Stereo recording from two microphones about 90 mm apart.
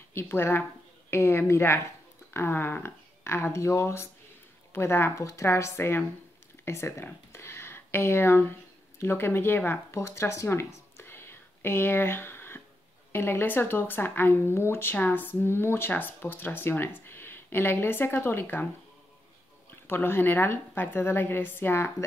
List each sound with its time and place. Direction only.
0.1 s speech: 25° left (ahead or behind)
19.7 s speech: 25° left (ahead or behind)